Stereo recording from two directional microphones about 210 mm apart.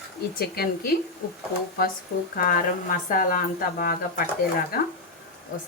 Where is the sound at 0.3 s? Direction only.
45° left (ahead or behind).